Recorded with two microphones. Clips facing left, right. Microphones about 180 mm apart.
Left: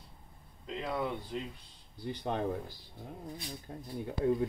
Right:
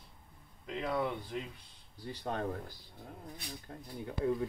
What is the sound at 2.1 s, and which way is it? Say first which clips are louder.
Speech: left 3 dB; 15° left (ahead or behind).